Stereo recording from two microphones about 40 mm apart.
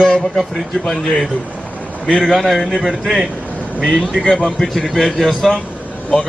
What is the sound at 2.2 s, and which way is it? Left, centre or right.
A man's voice, centre.